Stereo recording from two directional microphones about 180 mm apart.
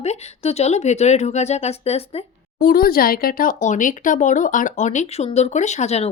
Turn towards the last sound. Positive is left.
turn(degrees=40)  # may be behind; listen again after turning